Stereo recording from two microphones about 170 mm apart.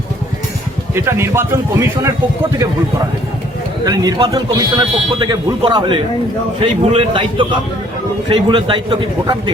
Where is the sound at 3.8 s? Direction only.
20° right (ahead or behind).